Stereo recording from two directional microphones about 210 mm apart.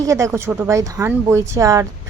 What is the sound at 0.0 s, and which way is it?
Speech, 15° right (ahead or behind).